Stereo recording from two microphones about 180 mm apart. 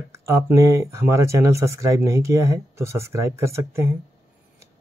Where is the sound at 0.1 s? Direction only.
15° right (ahead or behind).